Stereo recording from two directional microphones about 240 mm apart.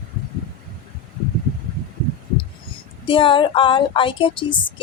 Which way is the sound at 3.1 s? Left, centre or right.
Left.